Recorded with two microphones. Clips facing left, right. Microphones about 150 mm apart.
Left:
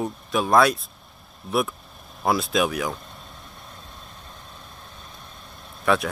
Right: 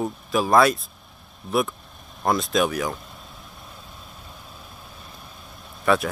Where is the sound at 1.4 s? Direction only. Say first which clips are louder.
Right 1 dB; centre (ahead or behind).